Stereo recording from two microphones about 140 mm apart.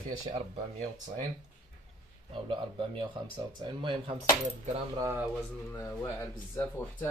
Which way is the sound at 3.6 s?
35° right (ahead or behind).